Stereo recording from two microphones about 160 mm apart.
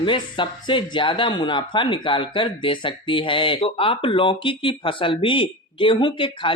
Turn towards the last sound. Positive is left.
turn(degrees=30)  # may be behind; listen again after turning